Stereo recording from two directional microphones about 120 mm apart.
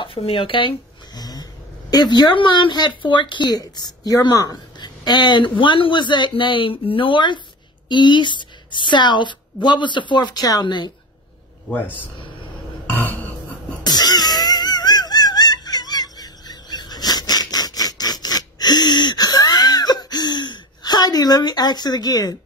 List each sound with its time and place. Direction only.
0.0 s a woman's voice: 45° left (ahead or behind)
12.9 s burping: 15° left (ahead or behind)
13.8 s wail: 35° left (ahead or behind)